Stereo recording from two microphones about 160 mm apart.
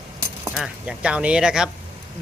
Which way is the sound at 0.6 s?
5° right (ahead or behind).